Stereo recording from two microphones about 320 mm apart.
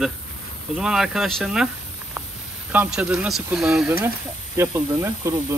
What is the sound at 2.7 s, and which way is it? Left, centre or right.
Speech, centre.